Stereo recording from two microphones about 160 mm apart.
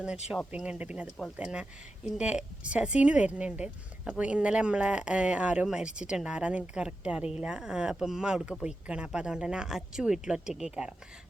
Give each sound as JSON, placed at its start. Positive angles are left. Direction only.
{"t": 0.5, "sound": "a woman's voice", "side_deg": -5}